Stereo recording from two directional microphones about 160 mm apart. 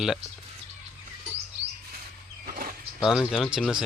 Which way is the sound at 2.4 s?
65° right (ahead or behind).